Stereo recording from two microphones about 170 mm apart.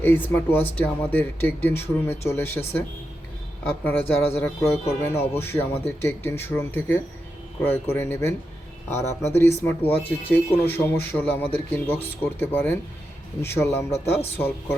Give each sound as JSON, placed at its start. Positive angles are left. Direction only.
{"t": 0.0, "sound": "speech", "side_deg": 10}
{"t": 4.3, "sound": "speech", "side_deg": 15}